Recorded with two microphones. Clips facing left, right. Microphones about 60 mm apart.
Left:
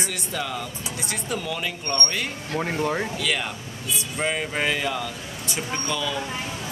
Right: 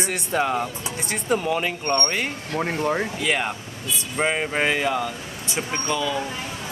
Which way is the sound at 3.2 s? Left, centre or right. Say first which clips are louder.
Right 3 dB; right.